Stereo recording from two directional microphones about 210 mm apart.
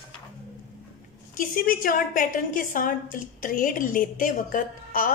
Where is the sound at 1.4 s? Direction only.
40° left (ahead or behind).